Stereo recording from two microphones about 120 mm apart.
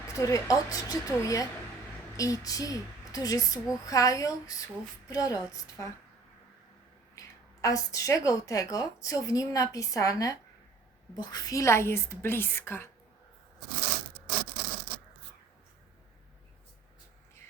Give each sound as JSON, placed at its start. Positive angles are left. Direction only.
{"t": 0.1, "sound": "a woman's voice", "side_deg": 25}
{"t": 7.2, "sound": "a woman's voice", "side_deg": 25}